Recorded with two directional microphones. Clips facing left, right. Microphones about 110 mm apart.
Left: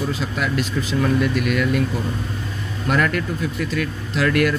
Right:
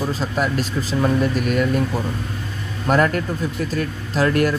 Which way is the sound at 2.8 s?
40° right (ahead or behind).